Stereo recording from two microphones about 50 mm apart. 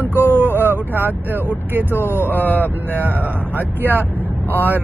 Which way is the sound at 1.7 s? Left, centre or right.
Right.